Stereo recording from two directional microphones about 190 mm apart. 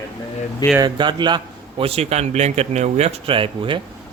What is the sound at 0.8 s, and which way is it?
Speech, 25° right (ahead or behind).